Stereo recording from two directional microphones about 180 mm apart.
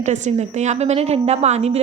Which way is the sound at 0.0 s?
40° right (ahead or behind).